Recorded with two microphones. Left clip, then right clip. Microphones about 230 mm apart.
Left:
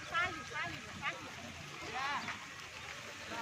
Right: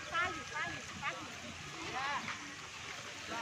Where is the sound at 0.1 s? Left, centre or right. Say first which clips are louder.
Even; left.